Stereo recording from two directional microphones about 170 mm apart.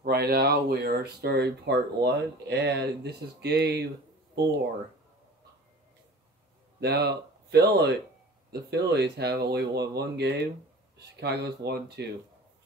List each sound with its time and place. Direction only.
0.0 s speech: 65° right (ahead or behind)
6.8 s speech: 70° right (ahead or behind)